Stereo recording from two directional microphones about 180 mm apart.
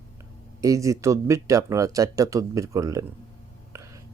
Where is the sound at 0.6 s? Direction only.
15° right (ahead or behind).